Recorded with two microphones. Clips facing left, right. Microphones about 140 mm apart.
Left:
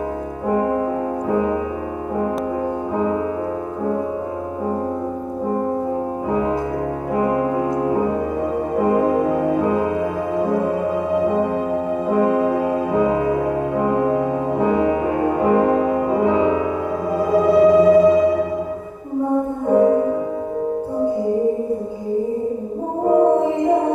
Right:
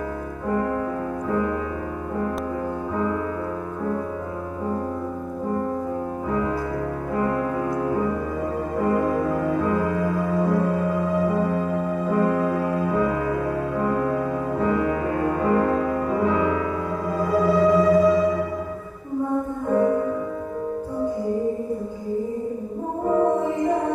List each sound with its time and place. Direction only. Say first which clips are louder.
0.5 s music: left 5 dB; 20° left (ahead or behind)
6.3 s music: left 4 dB; 20° left (ahead or behind)
19.7 s music: left 6 dB; 20° left (ahead or behind)
23.0 s music: left 6 dB; 20° left (ahead or behind)